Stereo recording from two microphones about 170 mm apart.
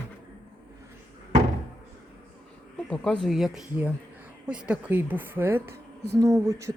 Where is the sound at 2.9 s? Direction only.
Centre (ahead or behind).